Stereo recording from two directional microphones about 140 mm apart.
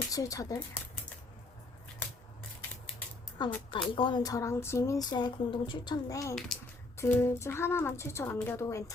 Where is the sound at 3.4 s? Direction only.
30° left (ahead or behind).